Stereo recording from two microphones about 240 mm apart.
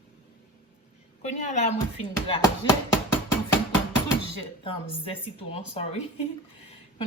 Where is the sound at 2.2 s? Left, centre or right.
Centre.